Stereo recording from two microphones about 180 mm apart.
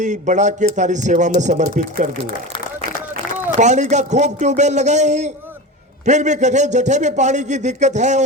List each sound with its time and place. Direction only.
0.0 s speech: 40° right (ahead or behind)
3.6 s speech: 40° right (ahead or behind)